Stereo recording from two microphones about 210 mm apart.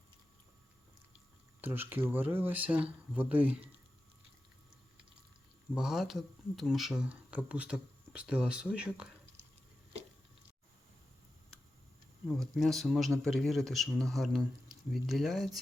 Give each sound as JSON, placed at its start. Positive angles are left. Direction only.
{"t": 1.6, "sound": "speech", "side_deg": -10}
{"t": 5.7, "sound": "speech", "side_deg": 0}
{"t": 12.3, "sound": "speech", "side_deg": 0}